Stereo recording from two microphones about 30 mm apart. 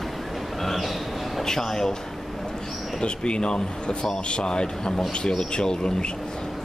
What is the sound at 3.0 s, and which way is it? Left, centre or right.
Speech, left.